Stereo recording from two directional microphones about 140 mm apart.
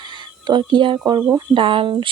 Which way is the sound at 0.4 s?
35° right (ahead or behind).